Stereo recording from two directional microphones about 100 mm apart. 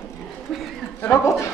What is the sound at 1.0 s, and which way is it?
Speech, 25° left (ahead or behind).